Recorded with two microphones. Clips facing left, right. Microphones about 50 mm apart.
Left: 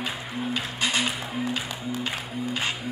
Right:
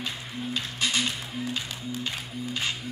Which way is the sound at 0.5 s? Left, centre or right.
Centre.